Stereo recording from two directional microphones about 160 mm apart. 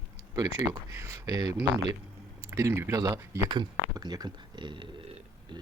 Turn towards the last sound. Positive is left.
turn(degrees=-30)  # may be behind; listen again after turning